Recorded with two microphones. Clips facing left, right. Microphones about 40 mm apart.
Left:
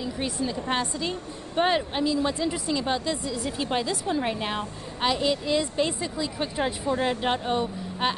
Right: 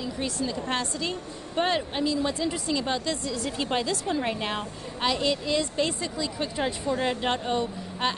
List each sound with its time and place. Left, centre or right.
0.7 s a woman's voice: centre